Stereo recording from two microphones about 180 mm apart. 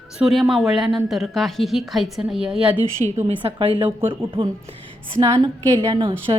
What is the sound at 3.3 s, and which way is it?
Speech, 30° right (ahead or behind).